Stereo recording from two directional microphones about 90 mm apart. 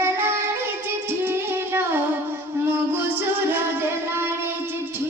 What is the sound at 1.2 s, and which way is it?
Music, 25° right (ahead or behind).